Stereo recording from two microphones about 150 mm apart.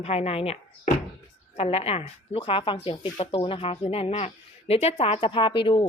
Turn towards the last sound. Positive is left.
turn(degrees=35)  # may be behind; listen again after turning